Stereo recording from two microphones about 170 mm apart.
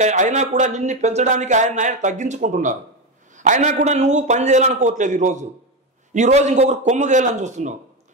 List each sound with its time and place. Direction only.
0.0 s speech: 45° right (ahead or behind)